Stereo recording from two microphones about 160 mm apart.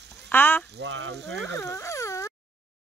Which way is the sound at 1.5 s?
15° left (ahead or behind).